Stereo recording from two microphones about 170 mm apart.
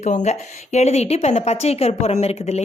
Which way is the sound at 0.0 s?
45° left (ahead or behind).